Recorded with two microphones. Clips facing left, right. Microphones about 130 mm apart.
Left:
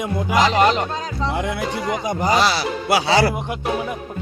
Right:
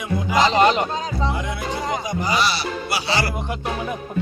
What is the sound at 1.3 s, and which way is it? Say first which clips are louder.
Speech: left 3 dB; 75° left (ahead or behind).